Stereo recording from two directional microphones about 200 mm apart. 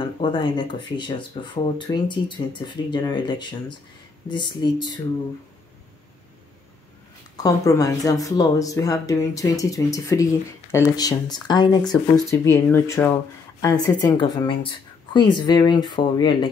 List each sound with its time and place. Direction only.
0.0 s speech: 25° left (ahead or behind)
7.4 s speech: 15° left (ahead or behind)